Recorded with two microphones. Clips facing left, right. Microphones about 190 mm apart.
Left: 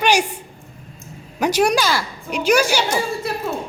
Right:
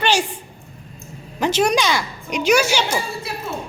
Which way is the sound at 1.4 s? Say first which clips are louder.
Left 1 dB; 10° left (ahead or behind).